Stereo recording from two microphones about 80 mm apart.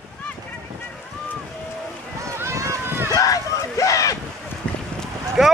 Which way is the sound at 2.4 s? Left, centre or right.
Right.